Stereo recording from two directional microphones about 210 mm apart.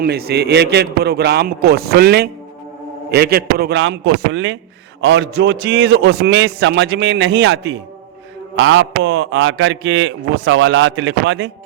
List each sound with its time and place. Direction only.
0.0 s a man's voice: 50° right (ahead or behind)